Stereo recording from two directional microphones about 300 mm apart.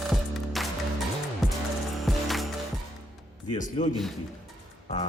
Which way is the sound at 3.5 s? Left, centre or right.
Left.